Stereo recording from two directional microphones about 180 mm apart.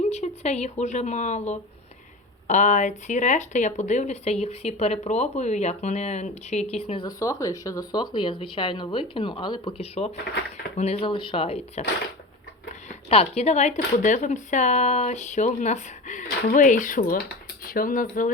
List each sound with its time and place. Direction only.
0.1 s speech: 40° left (ahead or behind)
12.9 s speech: 35° left (ahead or behind)